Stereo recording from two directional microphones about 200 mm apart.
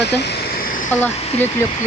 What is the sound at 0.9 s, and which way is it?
Speech, 10° left (ahead or behind).